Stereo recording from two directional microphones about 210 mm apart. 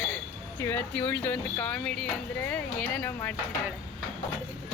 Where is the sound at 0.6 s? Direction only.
10° left (ahead or behind).